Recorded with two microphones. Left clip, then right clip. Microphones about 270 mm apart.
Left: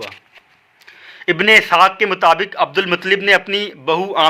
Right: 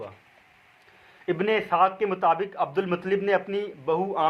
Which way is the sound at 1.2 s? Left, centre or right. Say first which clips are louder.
Left 14 dB; left.